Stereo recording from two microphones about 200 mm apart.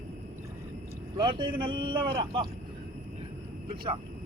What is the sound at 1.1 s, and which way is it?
Speech, 25° right (ahead or behind).